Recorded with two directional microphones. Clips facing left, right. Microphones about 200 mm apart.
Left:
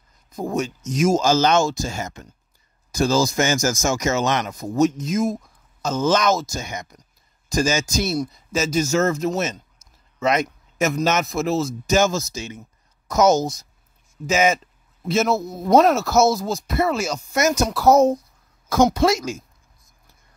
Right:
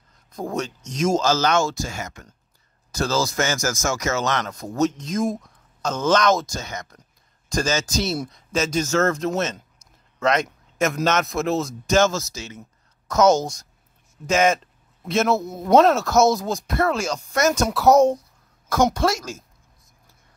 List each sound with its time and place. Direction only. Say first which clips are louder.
0.3 s speech: left 3 dB; 5° left (ahead or behind); by 2.2 s 25° left (ahead or behind)
2.9 s speech: left 4 dB; 15° left (ahead or behind)
10.1 s a sound: even; 5° left (ahead or behind)
11.1 s speech: even; 5° left (ahead or behind)